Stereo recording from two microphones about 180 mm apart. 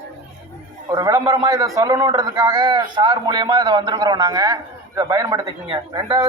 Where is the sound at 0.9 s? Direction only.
20° right (ahead or behind).